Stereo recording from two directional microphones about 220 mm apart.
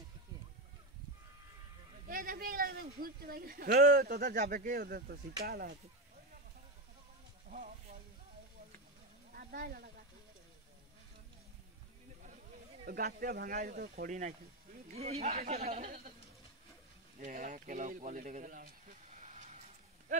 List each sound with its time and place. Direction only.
2.0 s speech: 40° right (ahead or behind)
7.4 s speech: 40° right (ahead or behind)
9.3 s speech: 40° right (ahead or behind)
12.8 s speech: 40° right (ahead or behind)
15.0 s speech: 30° right (ahead or behind)
17.2 s speech: 40° right (ahead or behind)